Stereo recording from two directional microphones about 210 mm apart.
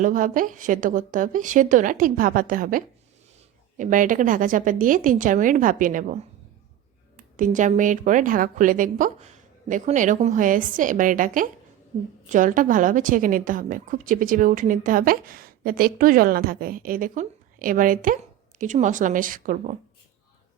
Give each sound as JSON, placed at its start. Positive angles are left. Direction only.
{"t": 0.0, "sound": "a woman's voice", "side_deg": -40}
{"t": 7.2, "sound": "a woman's voice", "side_deg": -40}